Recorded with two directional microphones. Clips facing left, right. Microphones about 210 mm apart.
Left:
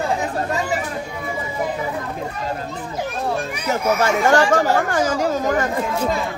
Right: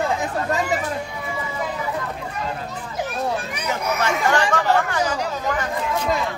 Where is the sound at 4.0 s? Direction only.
45° left (ahead or behind).